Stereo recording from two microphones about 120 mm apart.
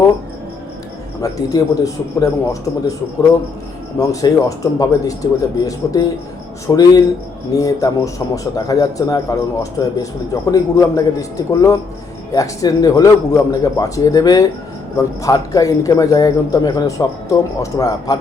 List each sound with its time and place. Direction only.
1.2 s a man's voice: 30° left (ahead or behind)
3.9 s a man's voice: 30° left (ahead or behind)